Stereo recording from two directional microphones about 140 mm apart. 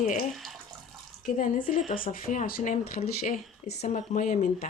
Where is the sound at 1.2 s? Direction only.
70° left (ahead or behind).